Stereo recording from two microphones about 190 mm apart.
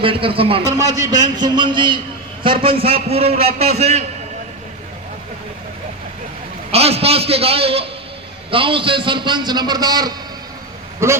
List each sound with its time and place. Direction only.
0.0 s a man's voice: 30° right (ahead or behind)
6.7 s a man's voice: 30° right (ahead or behind); by 11.2 s 15° right (ahead or behind)